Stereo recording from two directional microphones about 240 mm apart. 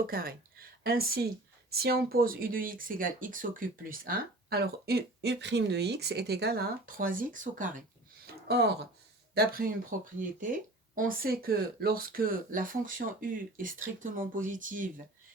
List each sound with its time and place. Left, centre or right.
0.0 s speech: right
8.4 s speech: right
10.9 s speech: right